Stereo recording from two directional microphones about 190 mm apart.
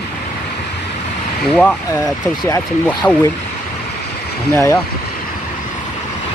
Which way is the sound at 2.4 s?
20° left (ahead or behind).